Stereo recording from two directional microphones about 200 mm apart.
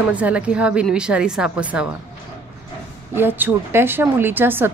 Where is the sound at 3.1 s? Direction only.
10° right (ahead or behind).